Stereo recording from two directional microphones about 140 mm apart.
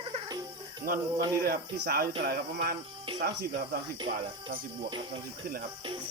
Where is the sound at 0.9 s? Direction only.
90° right.